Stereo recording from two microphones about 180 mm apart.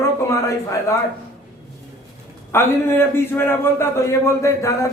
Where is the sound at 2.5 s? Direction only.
15° left (ahead or behind).